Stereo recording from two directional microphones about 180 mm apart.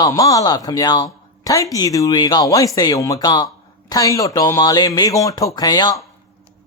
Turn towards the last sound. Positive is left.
turn(degrees=25)  # may be behind; listen again after turning